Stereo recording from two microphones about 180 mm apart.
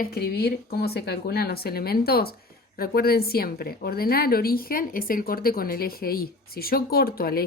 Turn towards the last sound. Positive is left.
turn(degrees=55)  # may be behind; listen again after turning